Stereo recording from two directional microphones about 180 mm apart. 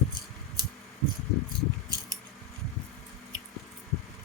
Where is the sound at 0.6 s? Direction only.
25° right (ahead or behind).